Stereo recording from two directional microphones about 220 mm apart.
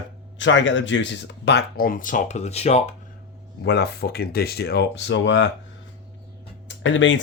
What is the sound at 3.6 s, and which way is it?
Speech, 50° left (ahead or behind).